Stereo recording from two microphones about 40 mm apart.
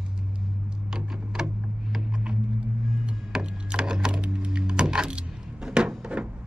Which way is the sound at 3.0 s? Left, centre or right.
Right.